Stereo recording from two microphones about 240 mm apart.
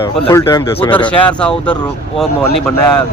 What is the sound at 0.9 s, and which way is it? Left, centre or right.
Speech, centre.